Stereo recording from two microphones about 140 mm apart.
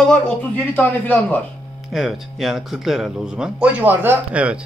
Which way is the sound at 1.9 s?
Centre (ahead or behind).